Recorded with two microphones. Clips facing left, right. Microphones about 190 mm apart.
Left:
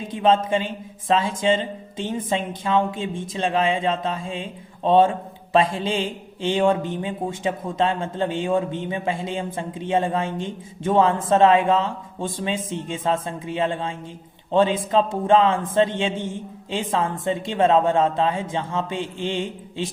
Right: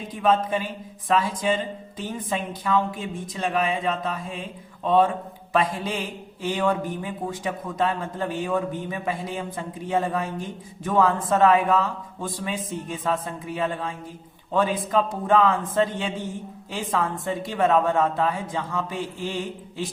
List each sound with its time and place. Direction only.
0.1 s speech: 25° left (ahead or behind)